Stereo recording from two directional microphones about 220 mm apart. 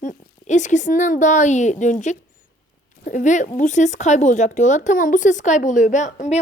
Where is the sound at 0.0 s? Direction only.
35° left (ahead or behind).